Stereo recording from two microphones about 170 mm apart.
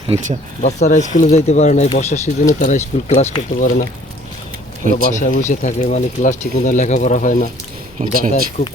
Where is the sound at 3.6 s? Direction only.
50° left (ahead or behind).